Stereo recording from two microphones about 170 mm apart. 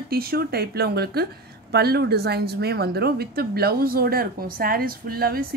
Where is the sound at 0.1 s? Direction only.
65° right (ahead or behind).